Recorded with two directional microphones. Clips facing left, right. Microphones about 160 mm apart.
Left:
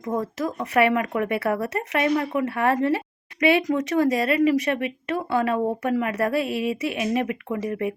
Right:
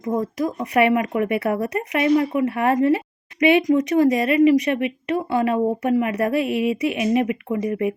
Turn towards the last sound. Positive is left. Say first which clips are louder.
# right 4 dB
turn(degrees=-15)  # may be behind; listen again after turning